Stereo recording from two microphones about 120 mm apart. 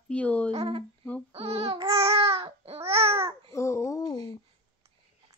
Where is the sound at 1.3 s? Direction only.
55° right (ahead or behind).